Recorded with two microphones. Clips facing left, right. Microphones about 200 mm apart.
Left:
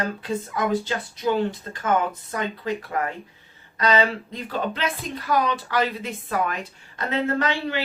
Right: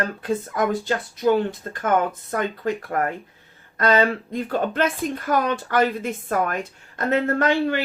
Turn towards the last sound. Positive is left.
turn(degrees=-50)  # may be behind; listen again after turning